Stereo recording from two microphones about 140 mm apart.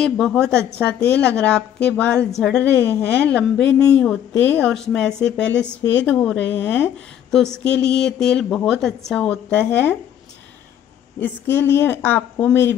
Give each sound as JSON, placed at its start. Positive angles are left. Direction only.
{"t": 0.0, "sound": "a woman's voice", "side_deg": 5}
{"t": 11.1, "sound": "a woman's voice", "side_deg": 15}